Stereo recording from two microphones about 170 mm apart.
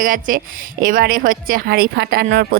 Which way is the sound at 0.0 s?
55° right (ahead or behind).